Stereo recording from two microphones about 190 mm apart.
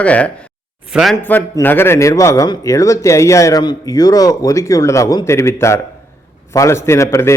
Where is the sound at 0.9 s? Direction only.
5° right (ahead or behind).